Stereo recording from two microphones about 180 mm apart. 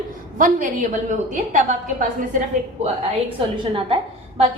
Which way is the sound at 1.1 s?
40° right (ahead or behind).